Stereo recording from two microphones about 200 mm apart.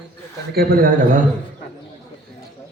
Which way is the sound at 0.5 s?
45° right (ahead or behind).